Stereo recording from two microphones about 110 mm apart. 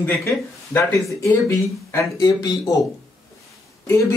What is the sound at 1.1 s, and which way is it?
Speech, 25° left (ahead or behind).